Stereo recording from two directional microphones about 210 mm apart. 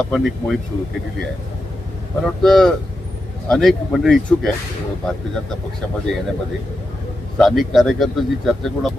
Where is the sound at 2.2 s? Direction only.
Centre (ahead or behind).